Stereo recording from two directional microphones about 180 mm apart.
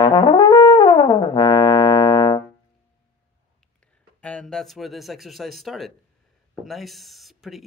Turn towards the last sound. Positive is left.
turn(degrees=0)  # may be behind; listen again after turning